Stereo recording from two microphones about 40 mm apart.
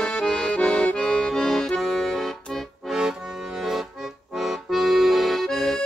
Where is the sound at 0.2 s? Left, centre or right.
Left.